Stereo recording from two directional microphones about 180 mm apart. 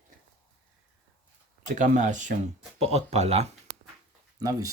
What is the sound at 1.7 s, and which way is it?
Speech, 45° right (ahead or behind).